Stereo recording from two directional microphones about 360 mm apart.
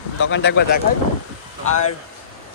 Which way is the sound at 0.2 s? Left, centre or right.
Left.